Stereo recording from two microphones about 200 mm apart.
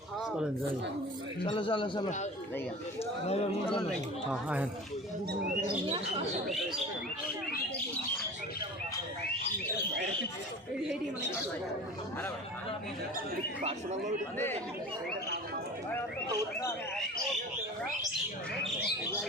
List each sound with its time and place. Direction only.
1.5 s a man's voice: 25° left (ahead or behind)
3.2 s a man's voice: 30° left (ahead or behind)
4.3 s speech: 5° right (ahead or behind)
13.6 s speech: 35° right (ahead or behind)